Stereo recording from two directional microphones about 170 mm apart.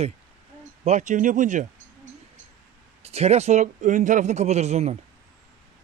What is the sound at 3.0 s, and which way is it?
A man's voice, 40° right (ahead or behind).